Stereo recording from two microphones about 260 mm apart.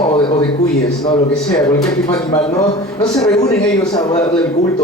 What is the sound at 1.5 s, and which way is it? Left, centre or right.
A man's voice, centre.